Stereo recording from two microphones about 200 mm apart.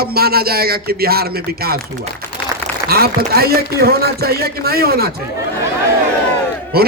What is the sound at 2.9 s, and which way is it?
A man's voice, 50° right (ahead or behind).